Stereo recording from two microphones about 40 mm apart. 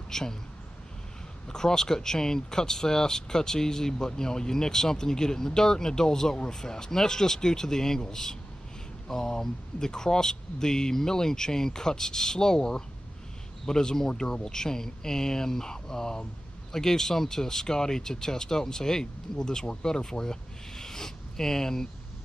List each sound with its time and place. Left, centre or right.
0.1 s a man's voice: centre
1.5 s speech: centre